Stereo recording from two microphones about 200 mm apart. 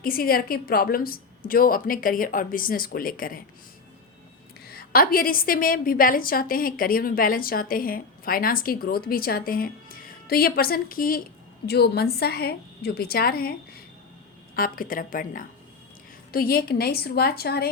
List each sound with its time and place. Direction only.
0.0 s a woman's voice: 45° left (ahead or behind)
4.7 s a woman's voice: 50° left (ahead or behind)